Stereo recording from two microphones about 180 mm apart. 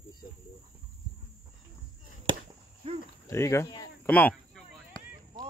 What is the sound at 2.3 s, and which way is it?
Chop, 25° right (ahead or behind).